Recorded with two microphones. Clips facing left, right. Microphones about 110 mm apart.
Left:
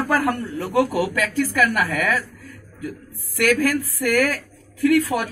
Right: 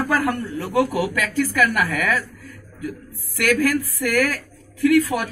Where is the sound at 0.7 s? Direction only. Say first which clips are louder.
Left 1 dB; 5° left (ahead or behind).